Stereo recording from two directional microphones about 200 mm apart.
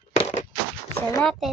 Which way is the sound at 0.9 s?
10° left (ahead or behind).